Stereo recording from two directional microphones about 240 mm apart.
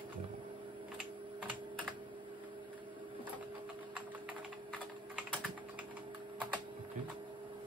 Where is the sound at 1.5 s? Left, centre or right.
Centre.